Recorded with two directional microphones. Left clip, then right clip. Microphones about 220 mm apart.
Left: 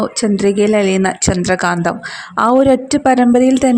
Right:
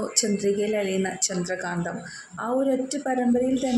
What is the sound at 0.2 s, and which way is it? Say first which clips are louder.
A woman's voice: left 9 dB; 40° left (ahead or behind).